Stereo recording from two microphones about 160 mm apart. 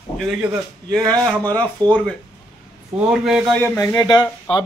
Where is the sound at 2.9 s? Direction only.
5° right (ahead or behind).